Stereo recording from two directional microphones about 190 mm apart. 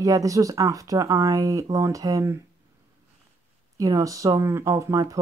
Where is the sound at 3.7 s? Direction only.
15° right (ahead or behind).